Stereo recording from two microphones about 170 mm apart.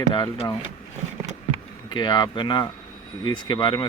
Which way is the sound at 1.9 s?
25° left (ahead or behind).